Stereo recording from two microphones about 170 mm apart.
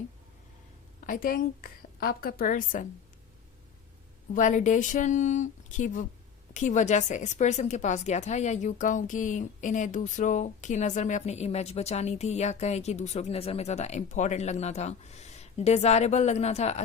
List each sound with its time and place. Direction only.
1.0 s a woman's voice: 55° left (ahead or behind)
4.4 s speech: 50° left (ahead or behind)